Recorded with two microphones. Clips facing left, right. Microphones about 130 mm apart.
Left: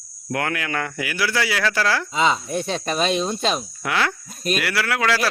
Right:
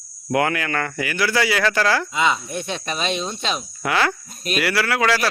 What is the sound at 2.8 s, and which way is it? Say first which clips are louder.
Speech: left 4 dB; 40° left (ahead or behind).